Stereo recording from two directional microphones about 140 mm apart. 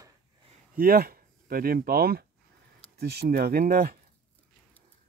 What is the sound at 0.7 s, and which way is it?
Speech, 90° right.